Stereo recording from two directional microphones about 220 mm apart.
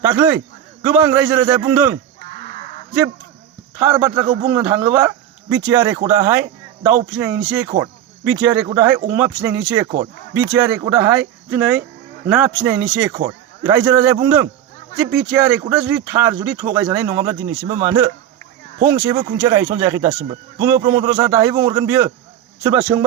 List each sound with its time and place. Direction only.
0.0 s a man's voice: 10° right (ahead or behind)
2.4 s a sound: 35° left (ahead or behind)
3.8 s a man's voice: 10° right (ahead or behind)
15.0 s speech: 55° right (ahead or behind)
15.3 s a man's voice: 5° right (ahead or behind)